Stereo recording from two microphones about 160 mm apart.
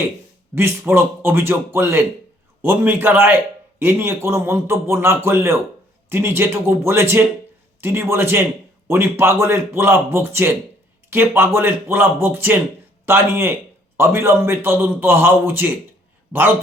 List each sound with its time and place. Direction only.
0.5 s a man's voice: 15° right (ahead or behind)